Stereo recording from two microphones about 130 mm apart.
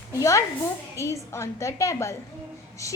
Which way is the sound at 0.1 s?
25° left (ahead or behind).